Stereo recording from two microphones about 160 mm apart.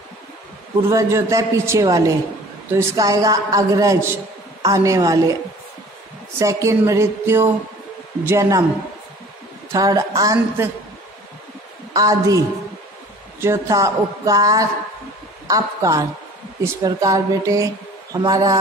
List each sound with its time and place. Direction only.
0.8 s a man's voice: 20° right (ahead or behind)
9.7 s a man's voice: 20° right (ahead or behind)
11.9 s a man's voice: 20° right (ahead or behind)